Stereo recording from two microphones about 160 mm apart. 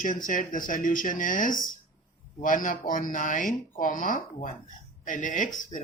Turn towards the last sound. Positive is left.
turn(degrees=55)  # may be behind; listen again after turning